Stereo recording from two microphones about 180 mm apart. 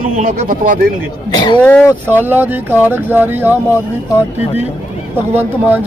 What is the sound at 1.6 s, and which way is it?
Speech, 5° left (ahead or behind).